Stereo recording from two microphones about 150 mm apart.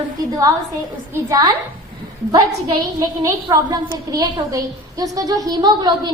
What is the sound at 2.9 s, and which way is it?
A woman's voice, 25° right (ahead or behind).